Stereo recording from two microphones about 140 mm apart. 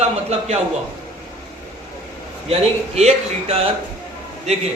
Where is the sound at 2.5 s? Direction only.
50° right (ahead or behind).